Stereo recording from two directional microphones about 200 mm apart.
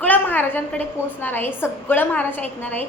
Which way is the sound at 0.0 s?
10° left (ahead or behind).